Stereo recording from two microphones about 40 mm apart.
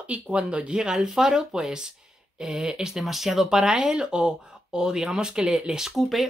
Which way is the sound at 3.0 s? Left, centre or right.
Centre.